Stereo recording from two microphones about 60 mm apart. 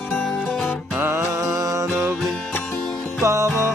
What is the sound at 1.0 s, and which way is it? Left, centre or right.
Music, right.